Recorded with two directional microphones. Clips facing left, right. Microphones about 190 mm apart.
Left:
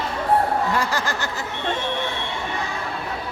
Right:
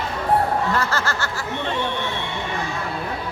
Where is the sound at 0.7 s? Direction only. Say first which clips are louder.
Even; 15° left (ahead or behind).